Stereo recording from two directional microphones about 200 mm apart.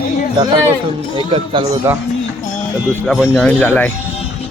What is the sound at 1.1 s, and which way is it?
Speech, 25° right (ahead or behind).